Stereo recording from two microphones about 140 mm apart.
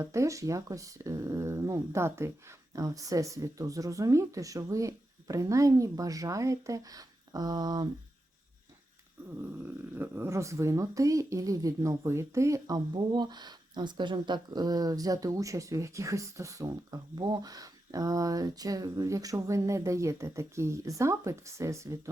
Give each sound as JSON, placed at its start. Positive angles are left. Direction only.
{"t": 0.0, "sound": "speech", "side_deg": -20}
{"t": 9.9, "sound": "speech", "side_deg": -15}